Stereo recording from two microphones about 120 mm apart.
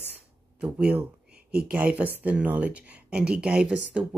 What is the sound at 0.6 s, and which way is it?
Speech, 5° right (ahead or behind).